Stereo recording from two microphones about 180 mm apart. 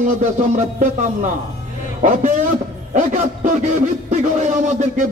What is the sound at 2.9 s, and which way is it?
A man's voice, 40° right (ahead or behind).